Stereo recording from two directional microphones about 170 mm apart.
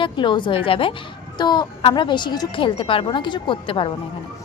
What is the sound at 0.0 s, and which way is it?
A woman's voice, 30° left (ahead or behind).